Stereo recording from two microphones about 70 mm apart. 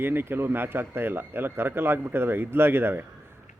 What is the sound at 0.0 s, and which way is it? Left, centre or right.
Speech, right.